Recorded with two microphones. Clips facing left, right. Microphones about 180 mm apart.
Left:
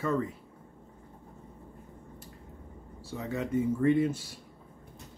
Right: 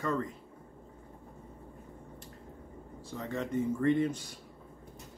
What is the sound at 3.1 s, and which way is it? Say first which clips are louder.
Speech: left 3 dB; 10° left (ahead or behind).